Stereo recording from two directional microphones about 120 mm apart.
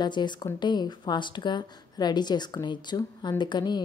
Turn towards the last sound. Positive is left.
turn(degrees=40)  # may be behind; listen again after turning